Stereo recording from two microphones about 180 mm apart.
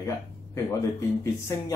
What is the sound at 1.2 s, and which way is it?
Speech, 15° left (ahead or behind).